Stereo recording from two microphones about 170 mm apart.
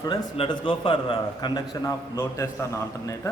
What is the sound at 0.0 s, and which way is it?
A man's voice, 25° left (ahead or behind).